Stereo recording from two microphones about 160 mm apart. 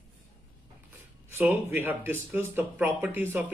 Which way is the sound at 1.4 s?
10° right (ahead or behind).